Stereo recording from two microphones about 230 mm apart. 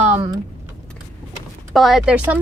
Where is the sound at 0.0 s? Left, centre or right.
Right.